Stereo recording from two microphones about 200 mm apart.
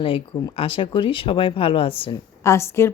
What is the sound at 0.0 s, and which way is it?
Speech, 25° left (ahead or behind).